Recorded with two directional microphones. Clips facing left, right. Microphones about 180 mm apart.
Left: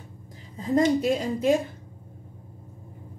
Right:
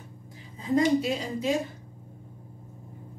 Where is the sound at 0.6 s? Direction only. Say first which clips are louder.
Left 2 dB; 45° left (ahead or behind).